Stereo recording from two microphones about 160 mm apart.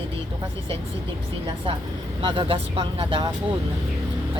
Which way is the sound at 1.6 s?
35° right (ahead or behind).